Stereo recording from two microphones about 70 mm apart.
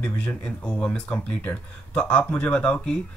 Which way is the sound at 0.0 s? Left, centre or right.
Centre.